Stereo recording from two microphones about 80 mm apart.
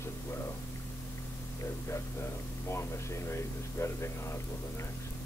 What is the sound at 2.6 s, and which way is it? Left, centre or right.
Speech, left.